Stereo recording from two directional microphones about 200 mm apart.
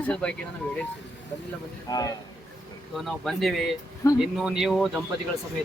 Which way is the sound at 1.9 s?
20° left (ahead or behind).